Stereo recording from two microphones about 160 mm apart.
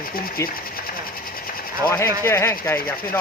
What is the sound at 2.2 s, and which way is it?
Speech, 15° left (ahead or behind).